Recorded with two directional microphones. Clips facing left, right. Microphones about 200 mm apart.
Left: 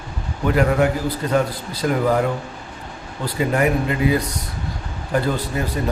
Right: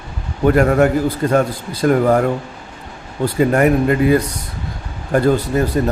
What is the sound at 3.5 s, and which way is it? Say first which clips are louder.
Speech: right 4 dB; 50° right (ahead or behind).